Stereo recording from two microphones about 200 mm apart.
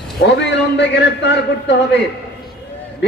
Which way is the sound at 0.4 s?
60° left (ahead or behind).